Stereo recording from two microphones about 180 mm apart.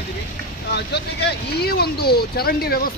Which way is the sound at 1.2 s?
60° left (ahead or behind).